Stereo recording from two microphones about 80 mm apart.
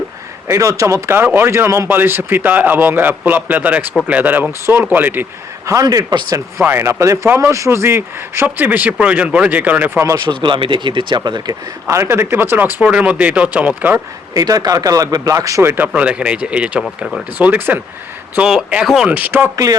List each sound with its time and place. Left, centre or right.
0.4 s speech: right
5.8 s speech: right
6.7 s speech: right
8.4 s speech: right
10.2 s speech: right
11.9 s speech: right
12.8 s speech: centre
14.3 s speech: right
15.6 s speech: right
15.9 s speech: centre
18.4 s speech: centre
19.1 s speech: right